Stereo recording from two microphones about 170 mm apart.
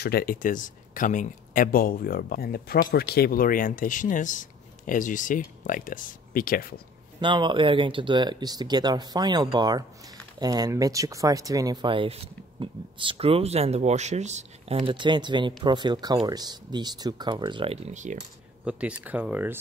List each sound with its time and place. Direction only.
0.0 s speech: 65° left (ahead or behind)
7.2 s speech: 30° right (ahead or behind)
18.6 s speech: 5° right (ahead or behind)